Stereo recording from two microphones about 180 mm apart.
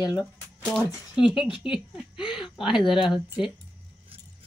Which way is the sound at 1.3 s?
25° left (ahead or behind).